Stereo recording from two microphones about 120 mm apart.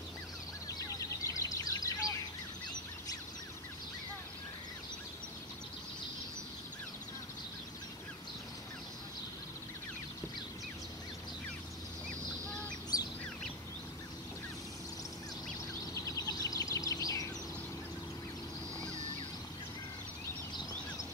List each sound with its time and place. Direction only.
0.7 s a sound: 30° left (ahead or behind)
12.1 s duck: 10° left (ahead or behind)
15.8 s bird: 30° left (ahead or behind)